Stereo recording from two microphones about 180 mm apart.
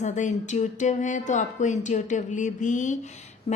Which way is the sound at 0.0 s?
40° left (ahead or behind).